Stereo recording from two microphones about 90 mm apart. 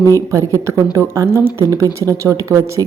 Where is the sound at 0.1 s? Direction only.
35° right (ahead or behind).